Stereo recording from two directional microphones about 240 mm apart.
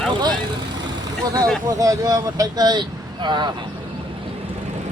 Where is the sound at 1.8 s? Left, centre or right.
Centre.